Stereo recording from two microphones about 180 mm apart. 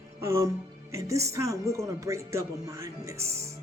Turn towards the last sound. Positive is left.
turn(degrees=-15)  # may be behind; listen again after turning